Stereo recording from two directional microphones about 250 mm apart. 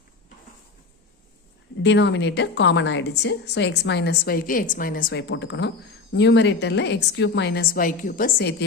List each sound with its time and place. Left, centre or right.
1.8 s a woman's voice: left